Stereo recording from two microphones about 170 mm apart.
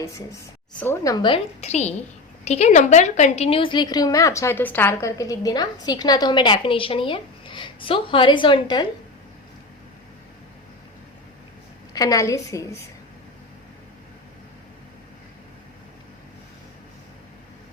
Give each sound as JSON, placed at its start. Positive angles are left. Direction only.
{"t": 0.8, "sound": "a woman's voice", "side_deg": 15}
{"t": 1.6, "sound": "a woman's voice", "side_deg": 40}
{"t": 11.9, "sound": "a woman's voice", "side_deg": 20}